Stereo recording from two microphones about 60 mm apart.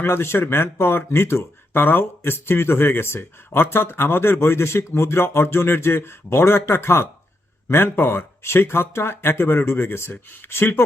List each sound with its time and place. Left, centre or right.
0.0 s speech: left